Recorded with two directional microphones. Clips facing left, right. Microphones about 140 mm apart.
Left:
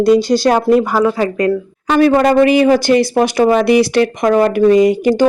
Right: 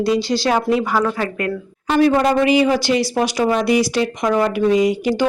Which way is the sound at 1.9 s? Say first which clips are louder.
Left 4 dB; 70° left (ahead or behind).